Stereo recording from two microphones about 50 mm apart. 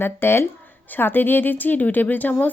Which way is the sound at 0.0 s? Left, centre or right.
Left.